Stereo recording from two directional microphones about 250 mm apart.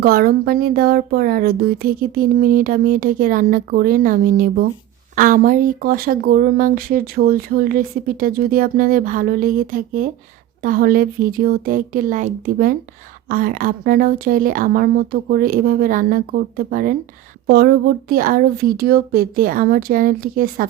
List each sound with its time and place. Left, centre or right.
0.0 s speech: right